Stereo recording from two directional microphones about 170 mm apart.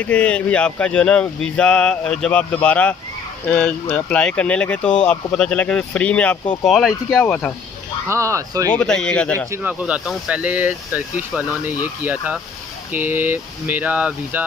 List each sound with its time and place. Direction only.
0.0 s speech: 5° left (ahead or behind)
8.1 s speech: 15° right (ahead or behind)
8.7 s speech: 5° left (ahead or behind)
9.5 s speech: 10° right (ahead or behind)